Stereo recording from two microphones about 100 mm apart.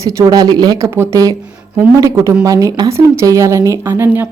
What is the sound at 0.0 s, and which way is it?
Speech, 35° right (ahead or behind).